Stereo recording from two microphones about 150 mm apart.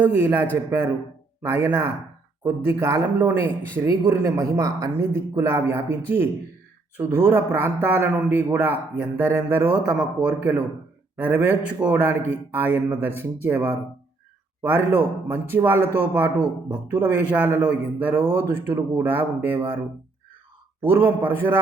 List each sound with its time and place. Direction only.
0.0 s a man's voice: 10° right (ahead or behind)
20.8 s a man's voice: 15° right (ahead or behind)